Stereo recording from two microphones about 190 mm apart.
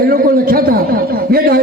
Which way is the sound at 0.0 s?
50° right (ahead or behind).